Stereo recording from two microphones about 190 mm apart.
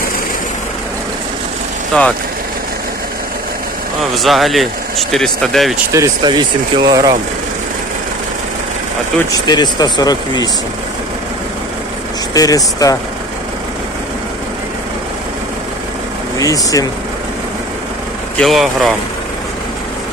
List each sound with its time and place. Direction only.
1.9 s speech: 5° left (ahead or behind)
4.1 s speech: centre (ahead or behind)
5.9 s speech: 20° right (ahead or behind)
9.5 s speech: 20° left (ahead or behind)
12.3 s speech: 20° left (ahead or behind)
16.4 s speech: 20° left (ahead or behind)
18.3 s speech: centre (ahead or behind)